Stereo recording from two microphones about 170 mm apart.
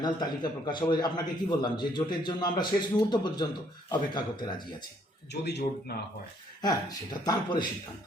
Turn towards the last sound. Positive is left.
turn(degrees=25)  # may be behind; listen again after turning